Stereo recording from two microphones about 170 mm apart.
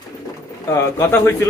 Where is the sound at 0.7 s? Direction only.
20° left (ahead or behind).